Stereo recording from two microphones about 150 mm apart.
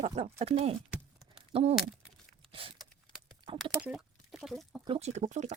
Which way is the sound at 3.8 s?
5° right (ahead or behind).